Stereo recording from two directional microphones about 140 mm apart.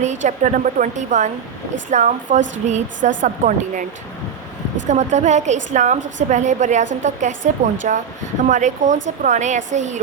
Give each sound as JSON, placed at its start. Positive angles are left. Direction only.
{"t": 0.0, "sound": "a woman's voice", "side_deg": -60}
{"t": 4.9, "sound": "a woman's voice", "side_deg": -55}